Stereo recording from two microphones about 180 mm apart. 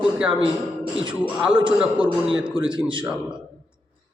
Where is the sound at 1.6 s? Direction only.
5° right (ahead or behind).